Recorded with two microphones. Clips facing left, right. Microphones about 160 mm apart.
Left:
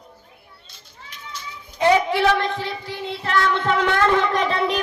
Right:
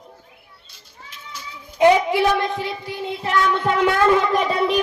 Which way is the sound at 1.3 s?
10° right (ahead or behind).